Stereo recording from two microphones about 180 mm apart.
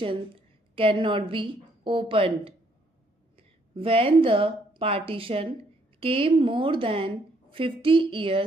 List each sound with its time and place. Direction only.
0.8 s a woman's voice: 30° right (ahead or behind)